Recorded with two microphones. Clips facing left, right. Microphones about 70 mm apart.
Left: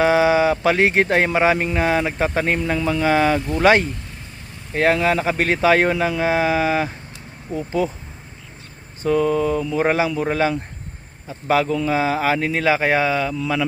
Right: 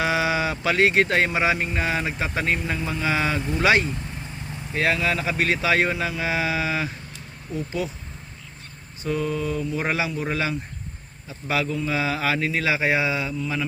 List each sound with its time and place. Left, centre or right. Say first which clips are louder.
0.0 s speech: left 7 dB; left
2.6 s mantra: left 7 dB; left
3.0 s speech: left 7 dB; left
9.0 s mantra: left 8 dB; left
9.8 s speech: left 9 dB; left
13.4 s speech: left 6 dB; left